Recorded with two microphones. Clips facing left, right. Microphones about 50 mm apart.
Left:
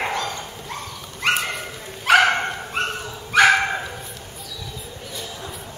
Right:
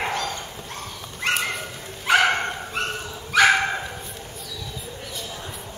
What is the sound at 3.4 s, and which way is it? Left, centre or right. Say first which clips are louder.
Dog: left 2 dB; centre.